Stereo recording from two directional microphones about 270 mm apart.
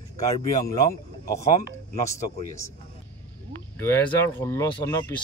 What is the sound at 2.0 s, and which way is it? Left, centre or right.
Speech, centre.